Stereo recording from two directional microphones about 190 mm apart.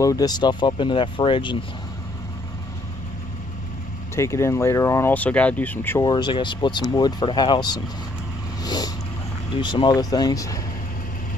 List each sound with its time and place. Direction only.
0.0 s speech: 20° left (ahead or behind)
4.1 s speech: 15° left (ahead or behind)
6.0 s speech: 25° left (ahead or behind)
8.6 s vehicle: 20° left (ahead or behind)
9.6 s speech: 25° left (ahead or behind)